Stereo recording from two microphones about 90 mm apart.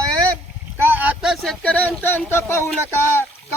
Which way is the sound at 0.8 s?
20° right (ahead or behind).